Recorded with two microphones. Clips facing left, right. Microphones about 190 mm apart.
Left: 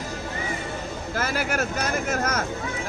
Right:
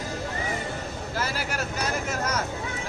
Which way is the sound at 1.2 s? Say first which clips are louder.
Left 5 dB; 50° left (ahead or behind).